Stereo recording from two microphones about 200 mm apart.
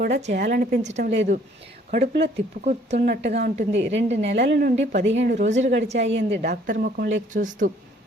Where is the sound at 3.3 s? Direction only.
35° right (ahead or behind).